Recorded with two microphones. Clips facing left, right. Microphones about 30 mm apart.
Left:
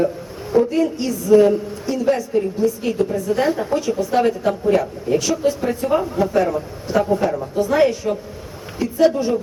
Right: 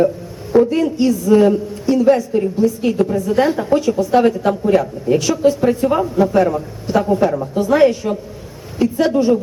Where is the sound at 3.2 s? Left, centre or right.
Right.